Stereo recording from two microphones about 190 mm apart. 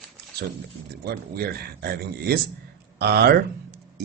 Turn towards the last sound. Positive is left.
turn(degrees=-60)  # may be behind; listen again after turning